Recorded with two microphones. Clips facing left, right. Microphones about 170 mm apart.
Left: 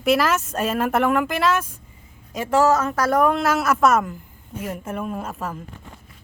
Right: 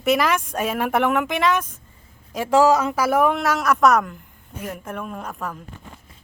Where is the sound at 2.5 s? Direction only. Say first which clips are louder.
Right 2 dB; 15° right (ahead or behind); by 5.5 s 5° left (ahead or behind).